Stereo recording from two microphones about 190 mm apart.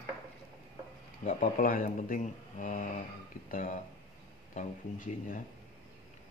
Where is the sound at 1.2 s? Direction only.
45° left (ahead or behind).